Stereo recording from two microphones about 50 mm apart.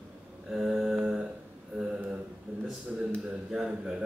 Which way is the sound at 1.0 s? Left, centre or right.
Centre.